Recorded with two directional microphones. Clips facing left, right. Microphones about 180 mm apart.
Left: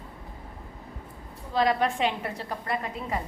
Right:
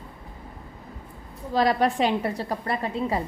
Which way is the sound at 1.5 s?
40° right (ahead or behind).